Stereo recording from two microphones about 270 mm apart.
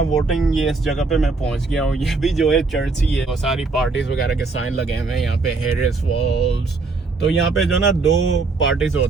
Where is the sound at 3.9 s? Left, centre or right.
Left.